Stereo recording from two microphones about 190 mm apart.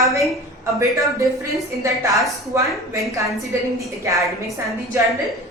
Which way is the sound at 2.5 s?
15° right (ahead or behind).